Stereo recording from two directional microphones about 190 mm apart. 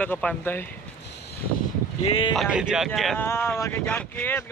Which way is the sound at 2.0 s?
30° left (ahead or behind).